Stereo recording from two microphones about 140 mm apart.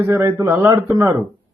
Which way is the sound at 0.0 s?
20° right (ahead or behind).